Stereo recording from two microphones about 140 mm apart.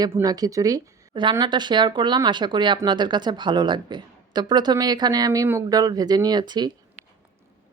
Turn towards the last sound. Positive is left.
turn(degrees=-30)  # may be behind; listen again after turning